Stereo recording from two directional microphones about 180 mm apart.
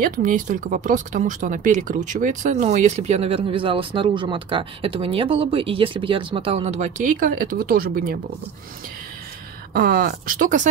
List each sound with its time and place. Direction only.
0.0 s speech: 50° right (ahead or behind)
9.8 s speech: 55° right (ahead or behind)